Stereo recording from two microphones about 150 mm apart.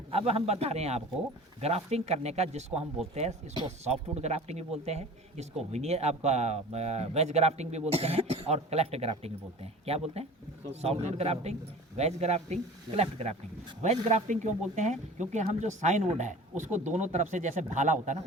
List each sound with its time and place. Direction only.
0.1 s speech: 40° right (ahead or behind)
3.8 s speech: 45° right (ahead or behind)